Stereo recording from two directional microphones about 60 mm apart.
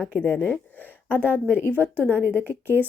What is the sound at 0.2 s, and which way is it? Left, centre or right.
Speech, left.